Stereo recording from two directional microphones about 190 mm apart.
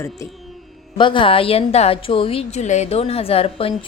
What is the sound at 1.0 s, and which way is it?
A woman's voice, 25° left (ahead or behind).